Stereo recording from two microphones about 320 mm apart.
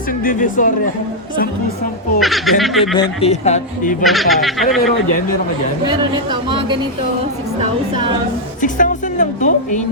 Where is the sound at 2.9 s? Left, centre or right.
Centre.